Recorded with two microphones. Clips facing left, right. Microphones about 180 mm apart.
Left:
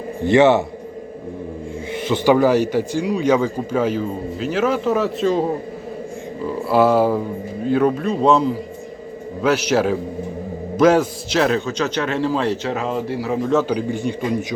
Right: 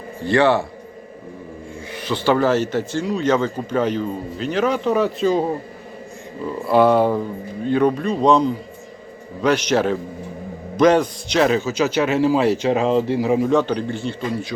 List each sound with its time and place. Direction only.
0.3 s a man's voice: 20° left (ahead or behind)
2.0 s speech: 15° left (ahead or behind); by 5.5 s centre (ahead or behind)
6.7 s a man's voice: 5° left (ahead or behind); by 13.5 s 15° right (ahead or behind)
13.5 s speech: 5° left (ahead or behind)